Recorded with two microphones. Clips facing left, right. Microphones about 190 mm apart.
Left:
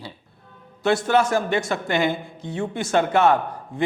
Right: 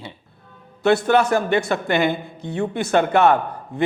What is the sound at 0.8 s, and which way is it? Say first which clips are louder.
Speech: right 3 dB; 60° right (ahead or behind).